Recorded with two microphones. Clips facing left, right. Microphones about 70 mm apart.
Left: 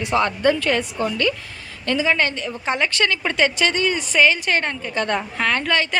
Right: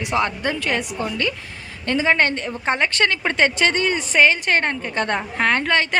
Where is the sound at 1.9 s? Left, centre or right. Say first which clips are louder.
Right 1 dB; right.